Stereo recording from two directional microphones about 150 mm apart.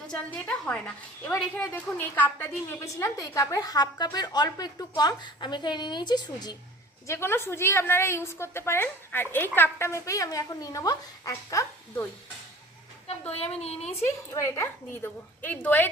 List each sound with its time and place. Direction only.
0.1 s a woman's voice: 5° left (ahead or behind); by 6.6 s 25° left (ahead or behind)
7.1 s a woman's voice: 15° left (ahead or behind)
13.1 s a woman's voice: 40° left (ahead or behind)
14.3 s a woman's voice: 20° left (ahead or behind)